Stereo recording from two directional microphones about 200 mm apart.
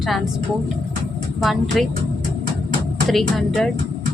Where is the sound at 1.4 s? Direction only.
Centre (ahead or behind).